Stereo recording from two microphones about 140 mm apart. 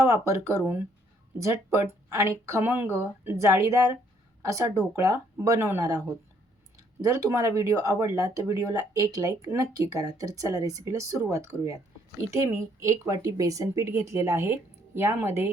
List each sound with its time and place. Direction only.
0.0 s speech: 20° right (ahead or behind)